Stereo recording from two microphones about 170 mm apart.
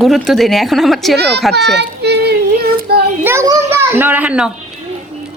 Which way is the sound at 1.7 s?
80° right.